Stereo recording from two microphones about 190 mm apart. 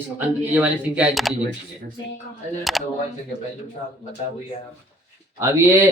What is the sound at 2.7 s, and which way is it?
Speech, centre (ahead or behind).